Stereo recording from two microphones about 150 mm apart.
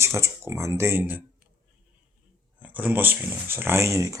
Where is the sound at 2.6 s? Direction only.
10° right (ahead or behind).